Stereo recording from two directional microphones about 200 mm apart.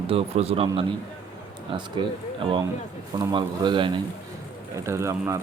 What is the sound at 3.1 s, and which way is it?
Speech, 20° right (ahead or behind).